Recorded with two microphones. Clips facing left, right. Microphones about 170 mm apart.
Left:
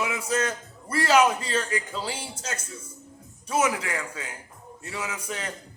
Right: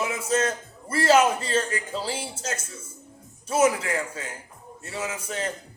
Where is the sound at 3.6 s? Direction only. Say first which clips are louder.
Right 6 dB; 35° right (ahead or behind).